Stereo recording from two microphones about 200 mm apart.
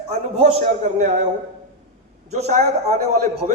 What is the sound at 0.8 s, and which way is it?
Speech, 30° right (ahead or behind).